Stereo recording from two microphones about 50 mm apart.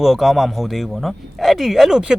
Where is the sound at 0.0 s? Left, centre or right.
Centre.